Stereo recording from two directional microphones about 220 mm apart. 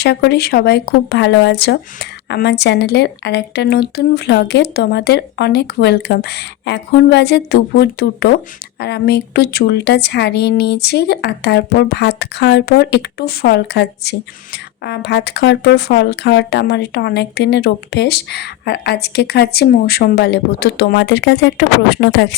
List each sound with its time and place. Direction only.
0.0 s speech: 50° left (ahead or behind)